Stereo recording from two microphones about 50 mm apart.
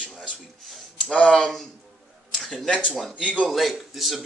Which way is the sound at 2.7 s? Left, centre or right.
Left.